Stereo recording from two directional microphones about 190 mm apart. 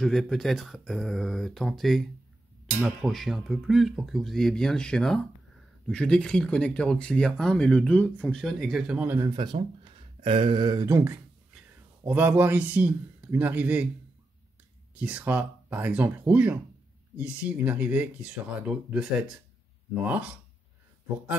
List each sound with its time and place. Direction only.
0.0 s speech: centre (ahead or behind); by 9.6 s 20° right (ahead or behind)
10.2 s a sound: 25° right (ahead or behind)
12.0 s speech: 10° right (ahead or behind)
15.0 s speech: 5° right (ahead or behind)